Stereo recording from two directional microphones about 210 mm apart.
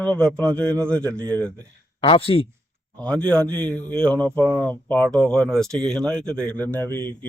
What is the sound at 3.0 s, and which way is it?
Speech, 5° left (ahead or behind).